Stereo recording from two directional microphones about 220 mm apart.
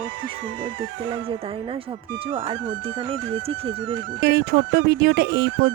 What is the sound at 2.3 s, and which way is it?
Speech, 25° right (ahead or behind).